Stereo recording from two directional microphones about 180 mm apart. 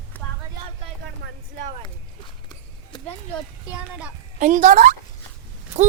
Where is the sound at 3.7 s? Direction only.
5° right (ahead or behind).